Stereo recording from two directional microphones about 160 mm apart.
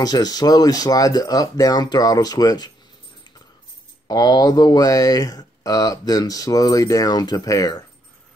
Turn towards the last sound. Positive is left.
turn(degrees=25)  # may be behind; listen again after turning